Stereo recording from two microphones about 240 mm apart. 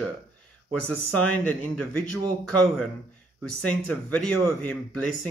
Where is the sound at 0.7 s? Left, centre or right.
Centre.